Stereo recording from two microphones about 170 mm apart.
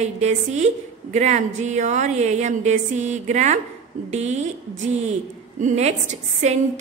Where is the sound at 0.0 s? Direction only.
40° right (ahead or behind).